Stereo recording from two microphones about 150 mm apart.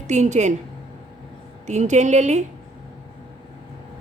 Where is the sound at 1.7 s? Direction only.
50° right (ahead or behind).